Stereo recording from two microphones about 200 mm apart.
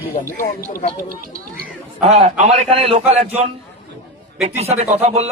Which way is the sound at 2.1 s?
30° right (ahead or behind).